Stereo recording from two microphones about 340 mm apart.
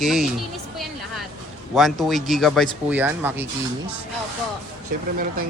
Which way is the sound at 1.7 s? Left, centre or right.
Centre.